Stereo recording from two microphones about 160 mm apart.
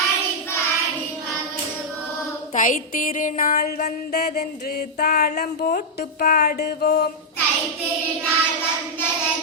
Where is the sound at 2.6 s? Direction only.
55° left (ahead or behind).